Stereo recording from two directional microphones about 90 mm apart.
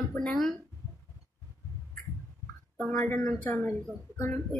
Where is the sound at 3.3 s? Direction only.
30° left (ahead or behind).